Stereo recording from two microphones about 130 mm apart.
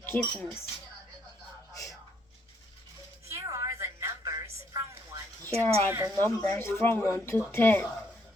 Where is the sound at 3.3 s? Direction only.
25° right (ahead or behind).